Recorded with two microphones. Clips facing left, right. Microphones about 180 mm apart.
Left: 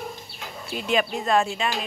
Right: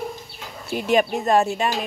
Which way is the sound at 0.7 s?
50° right (ahead or behind).